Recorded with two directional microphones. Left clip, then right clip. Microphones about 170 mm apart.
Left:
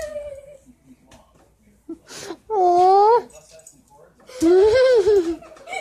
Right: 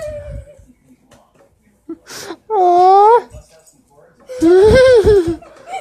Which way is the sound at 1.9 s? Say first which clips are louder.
Right 5 dB; centre (ahead or behind).